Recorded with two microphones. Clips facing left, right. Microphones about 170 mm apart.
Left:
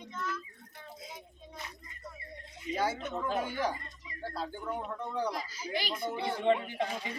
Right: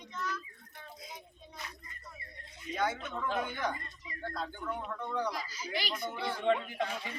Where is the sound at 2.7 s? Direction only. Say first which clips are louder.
Left 1 dB; 35° left (ahead or behind).